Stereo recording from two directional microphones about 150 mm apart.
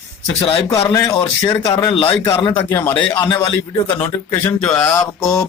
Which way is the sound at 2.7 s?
10° left (ahead or behind).